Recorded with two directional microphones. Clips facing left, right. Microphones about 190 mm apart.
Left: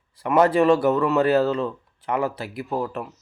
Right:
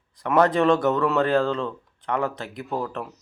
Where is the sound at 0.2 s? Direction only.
5° left (ahead or behind).